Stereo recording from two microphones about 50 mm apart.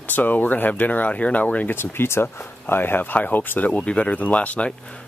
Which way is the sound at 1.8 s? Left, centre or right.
Left.